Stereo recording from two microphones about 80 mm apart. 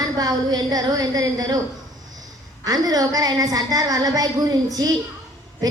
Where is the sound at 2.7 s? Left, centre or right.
Right.